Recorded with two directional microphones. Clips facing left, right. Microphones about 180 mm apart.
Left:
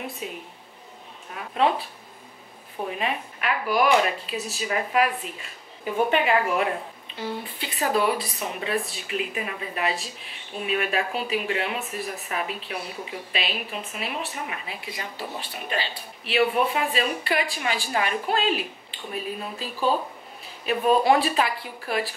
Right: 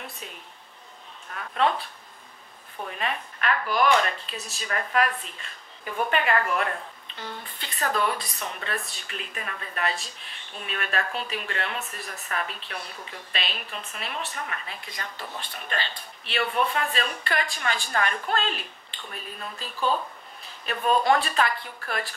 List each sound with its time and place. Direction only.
0.0 s speech: 5° left (ahead or behind)